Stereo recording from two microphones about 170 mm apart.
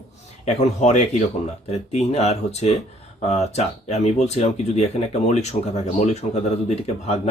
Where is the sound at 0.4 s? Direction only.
40° left (ahead or behind).